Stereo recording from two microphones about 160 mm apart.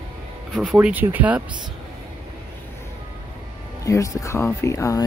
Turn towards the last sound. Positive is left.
turn(degrees=20)  # may be behind; listen again after turning